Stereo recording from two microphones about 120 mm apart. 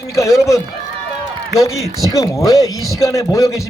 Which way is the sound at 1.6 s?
25° left (ahead or behind).